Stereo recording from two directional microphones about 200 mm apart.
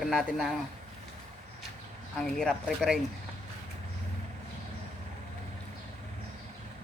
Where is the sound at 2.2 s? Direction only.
5° left (ahead or behind).